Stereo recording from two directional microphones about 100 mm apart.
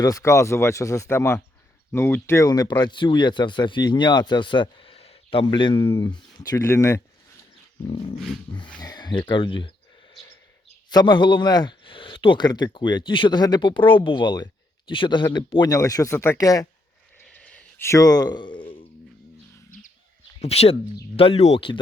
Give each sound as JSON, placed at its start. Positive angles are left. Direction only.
{"t": 0.0, "sound": "speech", "side_deg": 35}
{"t": 2.5, "sound": "speech", "side_deg": 40}
{"t": 2.8, "sound": "speech", "side_deg": 55}
{"t": 7.9, "sound": "speech", "side_deg": 65}
{"t": 8.1, "sound": "dog", "side_deg": 0}
{"t": 8.8, "sound": "speech", "side_deg": 45}
{"t": 10.9, "sound": "speech", "side_deg": 50}
{"t": 15.7, "sound": "speech", "side_deg": 35}
{"t": 16.4, "sound": "speech", "side_deg": 35}
{"t": 17.3, "sound": "a sound", "side_deg": 15}
{"t": 17.8, "sound": "speech", "side_deg": 35}
{"t": 20.4, "sound": "speech", "side_deg": 90}
{"t": 21.2, "sound": "speech", "side_deg": 80}